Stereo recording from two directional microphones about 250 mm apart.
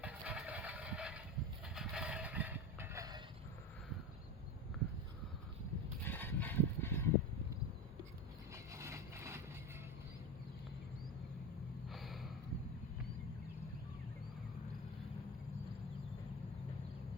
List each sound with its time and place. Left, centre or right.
0.0 s vehicle: centre
6.1 s a sound: centre
8.5 s vehicle: centre
11.9 s gasp: centre